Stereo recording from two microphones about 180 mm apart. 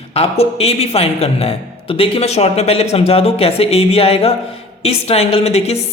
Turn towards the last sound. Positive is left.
turn(degrees=35)  # may be behind; listen again after turning